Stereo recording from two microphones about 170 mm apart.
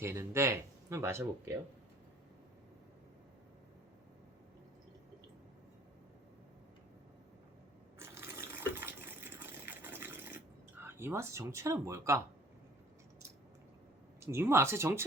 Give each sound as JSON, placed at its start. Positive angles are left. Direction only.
{"t": 0.0, "sound": "speech", "side_deg": -15}
{"t": 7.9, "sound": "water", "side_deg": -15}
{"t": 14.2, "sound": "speech", "side_deg": -15}